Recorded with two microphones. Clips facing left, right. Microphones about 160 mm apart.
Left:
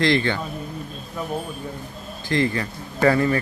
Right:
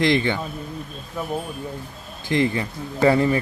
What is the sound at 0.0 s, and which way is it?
Speech, 20° right (ahead or behind).